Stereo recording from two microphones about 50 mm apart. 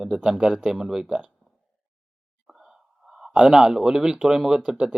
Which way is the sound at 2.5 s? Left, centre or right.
Centre.